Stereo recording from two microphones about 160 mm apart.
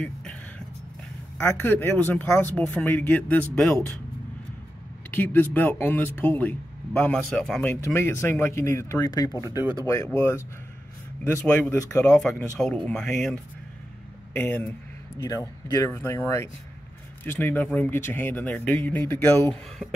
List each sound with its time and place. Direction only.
0.0 s vehicle: 5° left (ahead or behind)
1.4 s speech: 15° left (ahead or behind)
5.1 s speech: 10° left (ahead or behind)
15.2 s speech: 25° left (ahead or behind)